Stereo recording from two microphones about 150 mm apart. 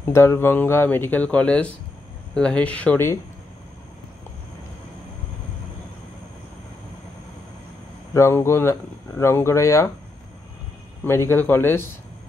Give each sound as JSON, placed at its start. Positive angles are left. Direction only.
{"t": 0.0, "sound": "speech", "side_deg": 15}
{"t": 8.1, "sound": "speech", "side_deg": 20}
{"t": 11.1, "sound": "speech", "side_deg": 15}